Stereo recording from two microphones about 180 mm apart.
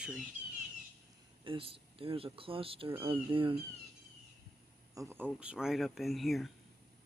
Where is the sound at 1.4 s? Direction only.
30° right (ahead or behind).